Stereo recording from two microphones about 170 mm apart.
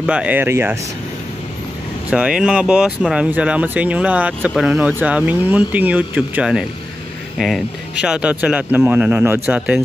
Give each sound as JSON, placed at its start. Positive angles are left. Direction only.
{"t": 0.0, "sound": "speech", "side_deg": -5}
{"t": 2.0, "sound": "speech", "side_deg": -5}